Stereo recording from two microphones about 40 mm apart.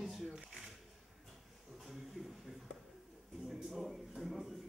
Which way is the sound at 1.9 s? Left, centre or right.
Centre.